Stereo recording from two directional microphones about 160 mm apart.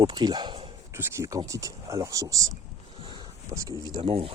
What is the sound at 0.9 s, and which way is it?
Speech, 20° right (ahead or behind).